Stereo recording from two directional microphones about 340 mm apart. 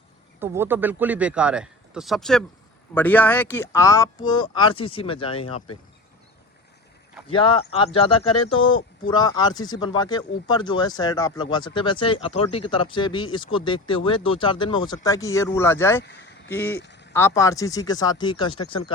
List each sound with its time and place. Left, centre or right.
0.3 s a man's voice: centre
7.3 s a man's voice: centre
16.7 s a sound: left
17.2 s speech: centre